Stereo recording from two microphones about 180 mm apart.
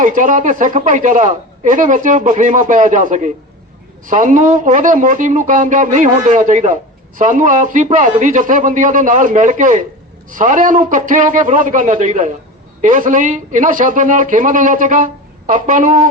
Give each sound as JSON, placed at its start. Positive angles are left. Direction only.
{"t": 0.0, "sound": "a woman's voice", "side_deg": -45}